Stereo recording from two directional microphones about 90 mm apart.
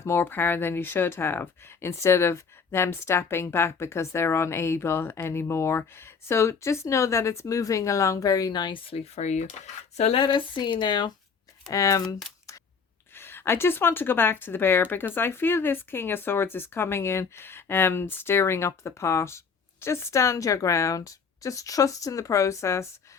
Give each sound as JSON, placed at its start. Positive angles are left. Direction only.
{"t": 0.0, "sound": "speech", "side_deg": 25}
{"t": 10.1, "sound": "speech", "side_deg": 75}
{"t": 11.7, "sound": "a woman's voice", "side_deg": 35}
{"t": 13.1, "sound": "a woman's voice", "side_deg": 25}